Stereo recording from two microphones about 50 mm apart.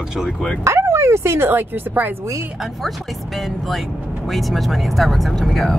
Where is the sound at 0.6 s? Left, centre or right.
Right.